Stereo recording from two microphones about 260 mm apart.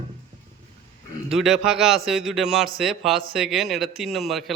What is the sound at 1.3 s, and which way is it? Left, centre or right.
Speech, centre.